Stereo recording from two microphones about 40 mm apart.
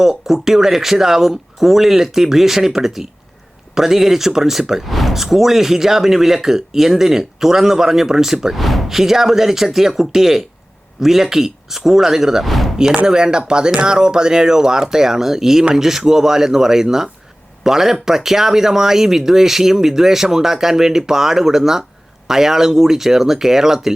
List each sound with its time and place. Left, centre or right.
0.0 s speech: centre
12.7 s speech: centre